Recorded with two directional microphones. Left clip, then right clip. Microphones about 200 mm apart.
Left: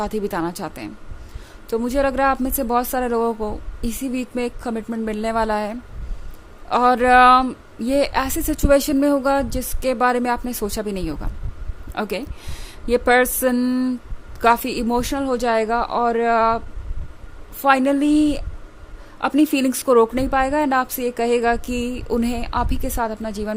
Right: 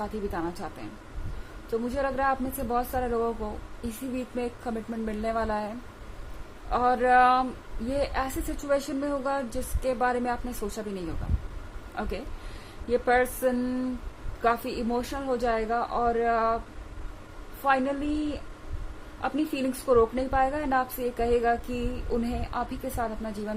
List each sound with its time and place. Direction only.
0.0 s a woman's voice: 50° left (ahead or behind)
17.7 s a woman's voice: 50° left (ahead or behind)